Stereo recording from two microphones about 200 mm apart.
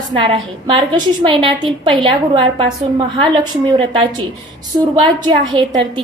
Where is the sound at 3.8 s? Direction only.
25° right (ahead or behind).